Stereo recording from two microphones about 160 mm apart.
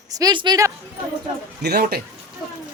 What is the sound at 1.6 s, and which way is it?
Speech, 85° right.